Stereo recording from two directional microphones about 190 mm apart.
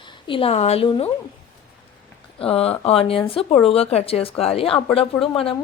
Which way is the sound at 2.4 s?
30° left (ahead or behind).